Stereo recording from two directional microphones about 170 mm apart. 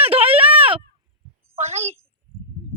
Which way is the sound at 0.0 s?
35° right (ahead or behind).